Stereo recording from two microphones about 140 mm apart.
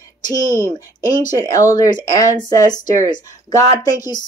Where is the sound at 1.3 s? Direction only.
25° left (ahead or behind).